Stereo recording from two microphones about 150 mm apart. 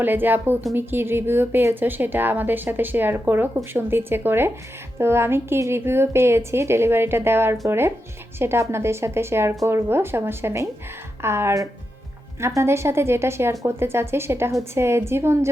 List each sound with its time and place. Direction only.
0.0 s a woman's voice: 15° right (ahead or behind)